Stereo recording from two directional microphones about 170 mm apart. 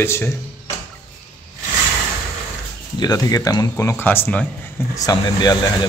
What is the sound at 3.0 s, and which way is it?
Speech, 20° left (ahead or behind).